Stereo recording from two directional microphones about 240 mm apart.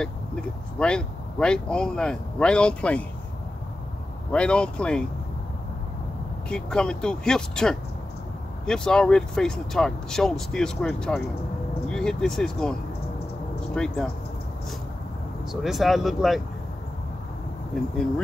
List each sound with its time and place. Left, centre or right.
0.0 s speech: centre
4.3 s speech: centre
6.5 s speech: centre
13.7 s speech: centre
15.5 s speech: centre